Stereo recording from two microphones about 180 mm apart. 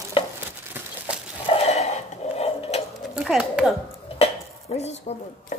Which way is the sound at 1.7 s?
40° left (ahead or behind).